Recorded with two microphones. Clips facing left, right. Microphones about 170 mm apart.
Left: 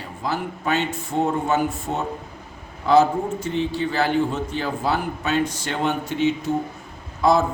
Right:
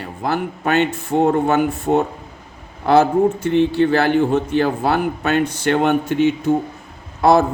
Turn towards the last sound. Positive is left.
turn(degrees=-60)  # may be behind; listen again after turning